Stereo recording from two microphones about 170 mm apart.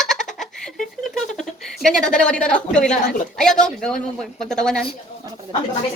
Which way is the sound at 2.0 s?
5° left (ahead or behind).